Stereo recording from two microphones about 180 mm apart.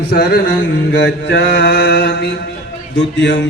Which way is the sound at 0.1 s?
60° left (ahead or behind).